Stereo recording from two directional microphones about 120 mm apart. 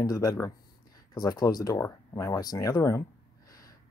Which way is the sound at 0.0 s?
30° left (ahead or behind).